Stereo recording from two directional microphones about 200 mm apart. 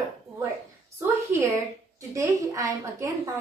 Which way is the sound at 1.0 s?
15° right (ahead or behind).